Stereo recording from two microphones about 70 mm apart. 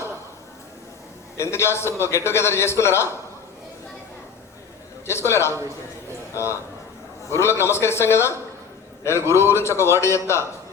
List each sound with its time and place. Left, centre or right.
1.4 s a man's voice: left
5.0 s a man's voice: left